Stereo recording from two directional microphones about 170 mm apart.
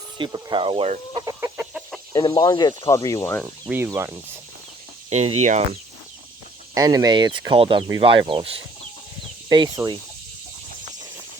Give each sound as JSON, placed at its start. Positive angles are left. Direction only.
{"t": 0.2, "sound": "speech", "side_deg": -25}
{"t": 1.2, "sound": "chicken", "side_deg": -20}
{"t": 2.1, "sound": "speech", "side_deg": 25}
{"t": 3.4, "sound": "speech", "side_deg": -15}
{"t": 5.0, "sound": "speech", "side_deg": -40}
{"t": 6.7, "sound": "speech", "side_deg": -20}